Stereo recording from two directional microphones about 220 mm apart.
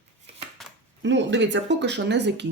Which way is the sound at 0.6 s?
Centre (ahead or behind).